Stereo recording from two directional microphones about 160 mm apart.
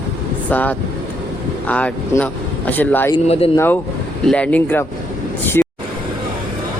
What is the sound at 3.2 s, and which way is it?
Speech, 40° left (ahead or behind).